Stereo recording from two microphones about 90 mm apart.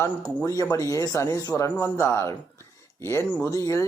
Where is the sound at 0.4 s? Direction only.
45° left (ahead or behind).